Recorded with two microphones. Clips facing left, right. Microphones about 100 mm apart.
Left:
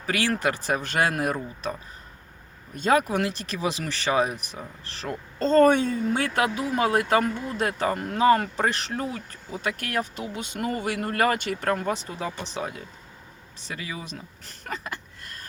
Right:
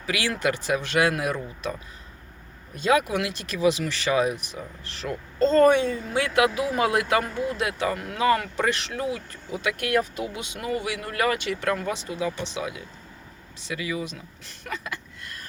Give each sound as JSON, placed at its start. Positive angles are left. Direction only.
{"t": 0.0, "sound": "speech", "side_deg": 40}
{"t": 2.7, "sound": "speech", "side_deg": 40}
{"t": 14.6, "sound": "a sound", "side_deg": 35}